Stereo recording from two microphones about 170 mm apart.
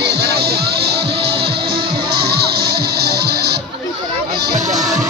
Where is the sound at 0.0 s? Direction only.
75° right (ahead or behind).